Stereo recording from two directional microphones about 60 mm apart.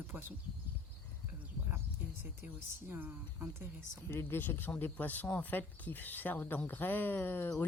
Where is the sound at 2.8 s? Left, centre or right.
Right.